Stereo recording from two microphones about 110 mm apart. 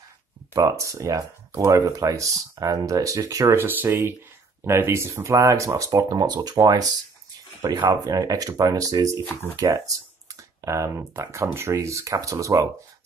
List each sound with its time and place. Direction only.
0.5 s speech: 30° right (ahead or behind)